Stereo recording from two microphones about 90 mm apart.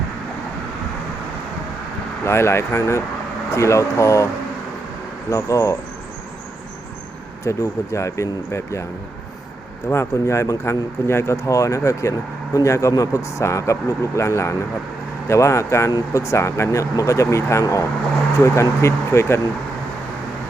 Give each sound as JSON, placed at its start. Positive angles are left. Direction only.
{"t": 2.2, "sound": "speech", "side_deg": 30}
{"t": 5.3, "sound": "speech", "side_deg": 35}
{"t": 7.4, "sound": "speech", "side_deg": 35}
{"t": 9.9, "sound": "speech", "side_deg": 30}